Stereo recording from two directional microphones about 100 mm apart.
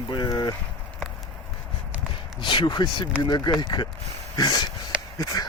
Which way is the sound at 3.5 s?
40° left (ahead or behind).